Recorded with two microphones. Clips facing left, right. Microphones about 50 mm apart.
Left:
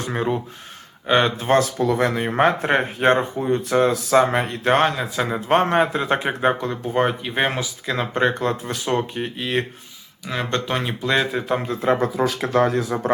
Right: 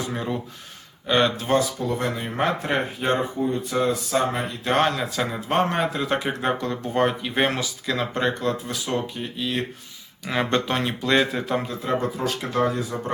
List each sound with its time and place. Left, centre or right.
0.1 s speech: left
1.5 s speech: left
1.8 s speech: left
2.1 s speech: left
3.0 s speech: left
4.8 s speech: centre
5.3 s speech: left
6.5 s speech: centre
8.4 s speech: left
10.2 s speech: centre
10.8 s speech: centre
11.7 s speech: left
12.6 s speech: left